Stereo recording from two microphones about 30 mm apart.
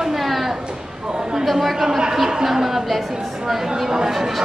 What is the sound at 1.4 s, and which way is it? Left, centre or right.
A man's voice, centre.